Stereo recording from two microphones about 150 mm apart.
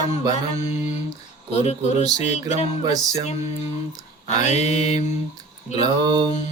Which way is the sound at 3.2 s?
45° left (ahead or behind).